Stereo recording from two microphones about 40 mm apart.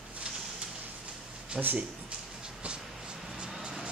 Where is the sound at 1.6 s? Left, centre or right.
Right.